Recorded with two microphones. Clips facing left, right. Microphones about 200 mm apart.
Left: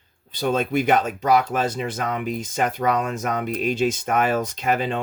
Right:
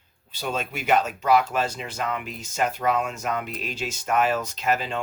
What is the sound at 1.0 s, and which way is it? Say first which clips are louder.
Speech: left 1 dB; 50° left (ahead or behind).